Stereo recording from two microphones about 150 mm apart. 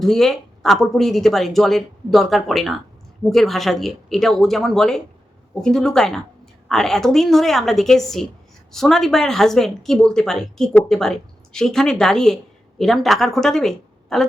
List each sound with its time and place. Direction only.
0.0 s speech: centre (ahead or behind)